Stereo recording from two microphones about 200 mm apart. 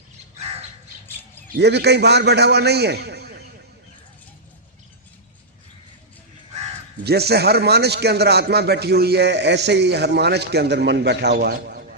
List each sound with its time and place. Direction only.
1.5 s a man's voice: 55° right (ahead or behind)
7.0 s a man's voice: 55° right (ahead or behind)